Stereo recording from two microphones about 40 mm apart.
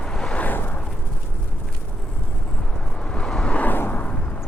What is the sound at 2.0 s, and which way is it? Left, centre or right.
Vehicle, left.